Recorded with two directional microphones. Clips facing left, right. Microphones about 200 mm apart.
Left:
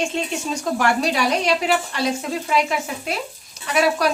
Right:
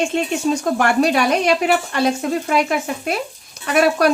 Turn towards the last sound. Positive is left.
turn(degrees=-55)  # may be behind; listen again after turning